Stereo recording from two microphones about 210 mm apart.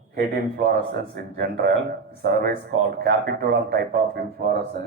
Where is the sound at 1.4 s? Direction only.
45° right (ahead or behind).